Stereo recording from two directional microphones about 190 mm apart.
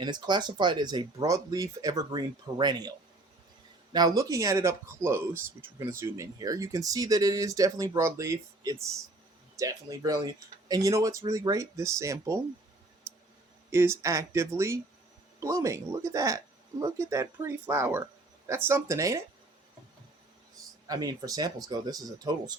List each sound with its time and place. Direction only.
0.0 s speech: 25° right (ahead or behind)
3.9 s speech: 20° right (ahead or behind)
13.1 s a sound: 15° right (ahead or behind)
13.7 s speech: 15° right (ahead or behind)
20.8 s speech: 20° right (ahead or behind)